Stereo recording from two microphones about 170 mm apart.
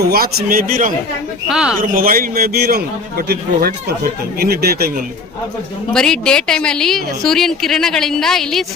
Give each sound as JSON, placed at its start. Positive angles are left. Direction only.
{"t": 0.0, "sound": "a man's voice", "side_deg": -65}
{"t": 1.5, "sound": "a woman's voice", "side_deg": -5}
{"t": 1.8, "sound": "a man's voice", "side_deg": -55}
{"t": 5.9, "sound": "a woman's voice", "side_deg": 5}